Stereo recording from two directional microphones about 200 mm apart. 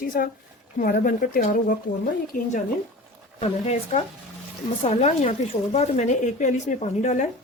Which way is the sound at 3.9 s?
40° left (ahead or behind).